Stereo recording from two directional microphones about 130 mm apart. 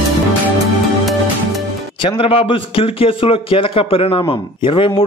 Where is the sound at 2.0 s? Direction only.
45° left (ahead or behind).